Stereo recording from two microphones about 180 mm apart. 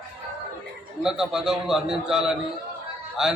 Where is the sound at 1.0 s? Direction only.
5° right (ahead or behind).